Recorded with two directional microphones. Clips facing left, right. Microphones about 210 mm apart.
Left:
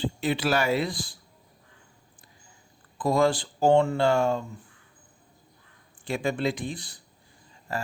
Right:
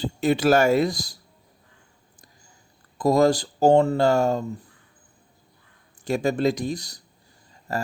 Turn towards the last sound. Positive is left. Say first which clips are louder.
# right 4 dB
turn(degrees=-40)  # may be behind; listen again after turning